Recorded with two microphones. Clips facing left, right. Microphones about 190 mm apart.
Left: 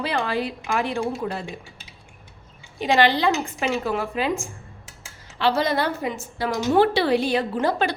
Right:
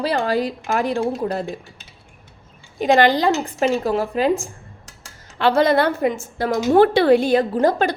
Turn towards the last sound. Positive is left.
turn(degrees=-40)  # may be behind; listen again after turning